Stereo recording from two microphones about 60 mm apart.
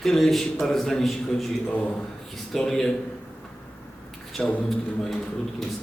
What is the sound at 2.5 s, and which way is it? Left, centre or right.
Speech, centre.